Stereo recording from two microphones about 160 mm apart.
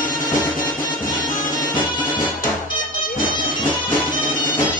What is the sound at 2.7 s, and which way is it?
Music, 60° left (ahead or behind).